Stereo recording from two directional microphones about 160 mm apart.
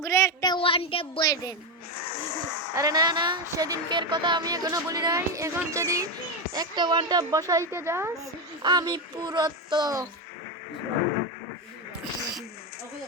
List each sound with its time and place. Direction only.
0.0 s speech: 20° left (ahead or behind)
2.7 s speech: 25° right (ahead or behind)
8.6 s speech: 25° right (ahead or behind)